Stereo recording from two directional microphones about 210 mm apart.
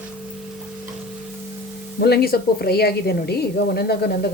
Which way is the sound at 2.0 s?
50° left (ahead or behind).